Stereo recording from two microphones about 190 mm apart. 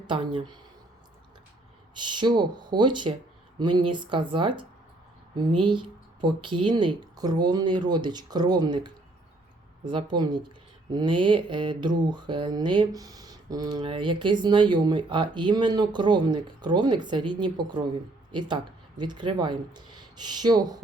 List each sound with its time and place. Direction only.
0.1 s mantra: 25° right (ahead or behind)
2.0 s mantra: 25° right (ahead or behind)
18.3 s speech: 25° right (ahead or behind)